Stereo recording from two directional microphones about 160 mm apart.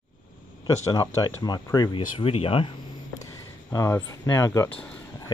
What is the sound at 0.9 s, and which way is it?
Speech, 25° left (ahead or behind).